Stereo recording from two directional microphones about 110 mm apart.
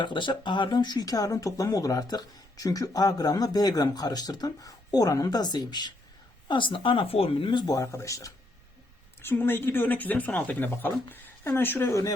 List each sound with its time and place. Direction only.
0.0 s speech: 45° left (ahead or behind); by 8.3 s 30° left (ahead or behind)
9.2 s speech: 20° left (ahead or behind)